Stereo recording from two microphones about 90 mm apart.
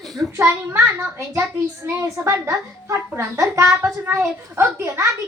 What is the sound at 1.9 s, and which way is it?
A woman's voice, 30° right (ahead or behind).